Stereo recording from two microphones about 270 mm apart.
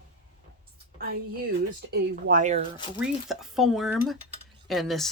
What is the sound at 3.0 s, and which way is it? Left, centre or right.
Speech, centre.